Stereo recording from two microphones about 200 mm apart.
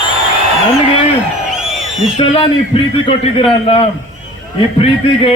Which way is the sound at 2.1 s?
30° left (ahead or behind).